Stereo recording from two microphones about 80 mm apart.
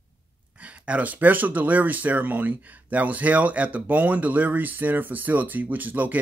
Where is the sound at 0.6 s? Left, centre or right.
Centre.